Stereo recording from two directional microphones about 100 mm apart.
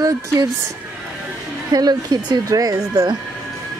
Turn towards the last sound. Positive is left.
turn(degrees=-40)  # may be behind; listen again after turning